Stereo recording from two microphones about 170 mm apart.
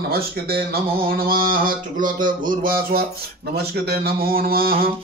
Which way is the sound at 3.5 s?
70° right (ahead or behind).